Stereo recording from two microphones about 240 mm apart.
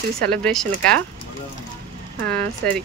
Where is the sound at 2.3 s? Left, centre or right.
Centre.